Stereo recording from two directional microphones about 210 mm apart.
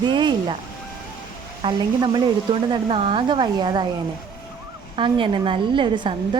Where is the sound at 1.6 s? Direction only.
20° right (ahead or behind).